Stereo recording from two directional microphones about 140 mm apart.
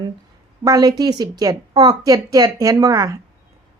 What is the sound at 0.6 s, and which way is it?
A woman's voice, 25° right (ahead or behind).